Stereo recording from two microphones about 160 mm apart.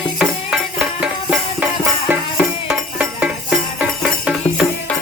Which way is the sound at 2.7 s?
10° right (ahead or behind).